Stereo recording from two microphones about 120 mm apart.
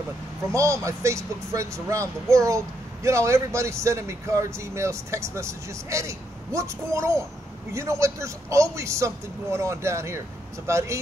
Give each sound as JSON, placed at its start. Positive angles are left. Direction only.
{"t": 0.5, "sound": "a man's voice", "side_deg": -25}